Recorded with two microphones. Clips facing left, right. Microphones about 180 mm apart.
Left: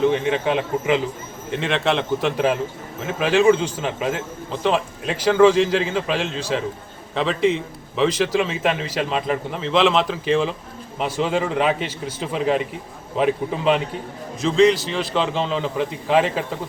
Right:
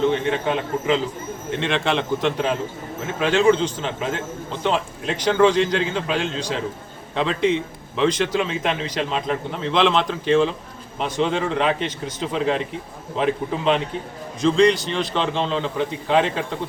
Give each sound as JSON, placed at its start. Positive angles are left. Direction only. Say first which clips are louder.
{"t": 0.1, "sound": "a man's voice", "louder": "left 1 dB", "side_deg": 5}